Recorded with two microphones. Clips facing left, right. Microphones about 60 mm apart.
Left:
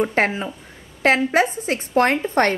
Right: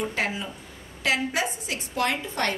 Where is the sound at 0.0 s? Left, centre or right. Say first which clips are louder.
Left 8 dB; left.